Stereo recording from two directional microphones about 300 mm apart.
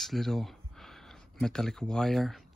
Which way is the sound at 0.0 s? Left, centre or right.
Centre.